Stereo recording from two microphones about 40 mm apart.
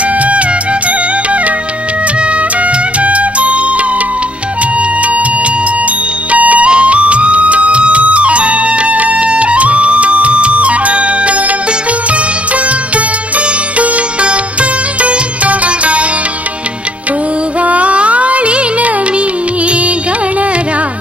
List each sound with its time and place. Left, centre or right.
0.2 s music: right
2.6 s music: right
13.7 s sitar: right
17.6 s music: right